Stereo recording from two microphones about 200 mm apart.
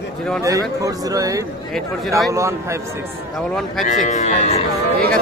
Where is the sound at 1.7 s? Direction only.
Centre (ahead or behind).